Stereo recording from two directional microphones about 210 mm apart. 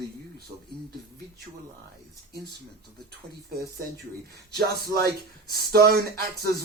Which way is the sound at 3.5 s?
50° right (ahead or behind).